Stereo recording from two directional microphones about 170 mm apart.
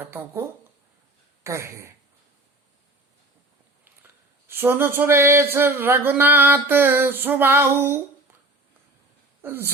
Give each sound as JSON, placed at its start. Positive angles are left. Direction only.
{"t": 0.0, "sound": "speech", "side_deg": -15}
{"t": 1.5, "sound": "speech", "side_deg": -15}
{"t": 4.4, "sound": "speech", "side_deg": -15}
{"t": 9.4, "sound": "speech", "side_deg": -15}